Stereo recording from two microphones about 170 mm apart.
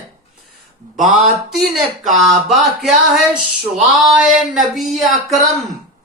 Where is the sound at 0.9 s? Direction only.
Centre (ahead or behind).